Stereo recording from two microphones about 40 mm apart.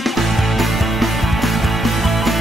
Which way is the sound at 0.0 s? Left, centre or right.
Centre.